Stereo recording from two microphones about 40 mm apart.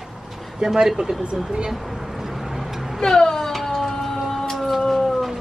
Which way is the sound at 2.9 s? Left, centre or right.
Centre.